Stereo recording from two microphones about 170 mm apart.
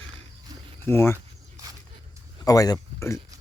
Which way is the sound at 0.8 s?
15° left (ahead or behind).